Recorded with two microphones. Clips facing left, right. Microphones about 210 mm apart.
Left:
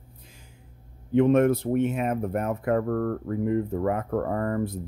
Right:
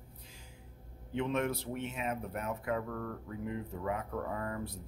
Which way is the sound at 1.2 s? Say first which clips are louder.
Left 14 dB; 50° left (ahead or behind).